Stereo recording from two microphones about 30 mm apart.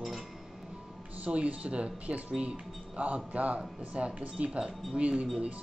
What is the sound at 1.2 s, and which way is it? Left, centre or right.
A man's voice, right.